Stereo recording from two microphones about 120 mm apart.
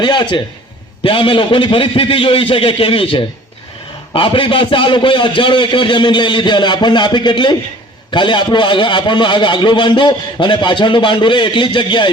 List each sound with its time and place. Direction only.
0.0 s a man's voice: 40° left (ahead or behind)